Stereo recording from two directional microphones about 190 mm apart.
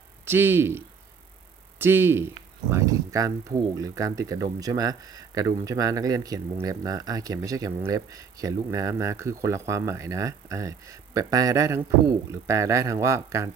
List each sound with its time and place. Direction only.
0.3 s speech: 10° right (ahead or behind)